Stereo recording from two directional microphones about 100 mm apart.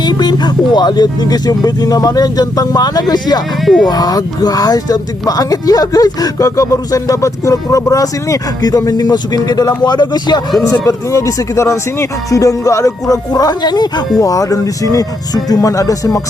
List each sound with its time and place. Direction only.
0.0 s speech: 45° left (ahead or behind)
10.6 s speech: 35° left (ahead or behind)